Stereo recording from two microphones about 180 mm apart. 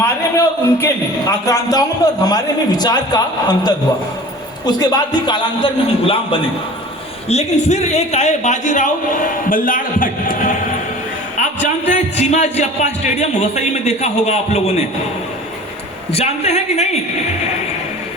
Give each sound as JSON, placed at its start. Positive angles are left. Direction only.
{"t": 0.0, "sound": "a man's voice", "side_deg": 15}
{"t": 16.1, "sound": "a man's voice", "side_deg": 35}